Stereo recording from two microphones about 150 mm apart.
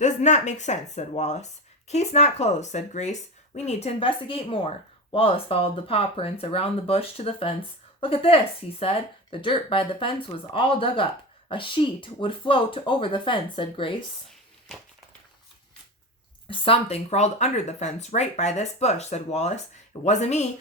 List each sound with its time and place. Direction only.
0.0 s speech: 55° left (ahead or behind); by 13.9 s 35° left (ahead or behind)
16.5 s speech: 40° left (ahead or behind)